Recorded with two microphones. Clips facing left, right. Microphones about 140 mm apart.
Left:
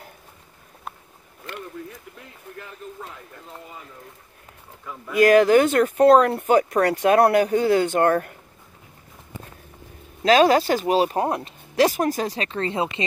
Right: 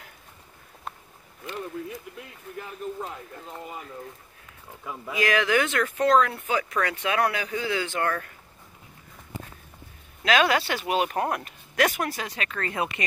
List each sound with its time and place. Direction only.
5.1 s speech: 45° left (ahead or behind)
10.2 s speech: 40° left (ahead or behind)